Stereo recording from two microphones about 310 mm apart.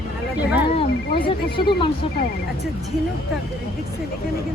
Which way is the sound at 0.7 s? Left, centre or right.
Centre.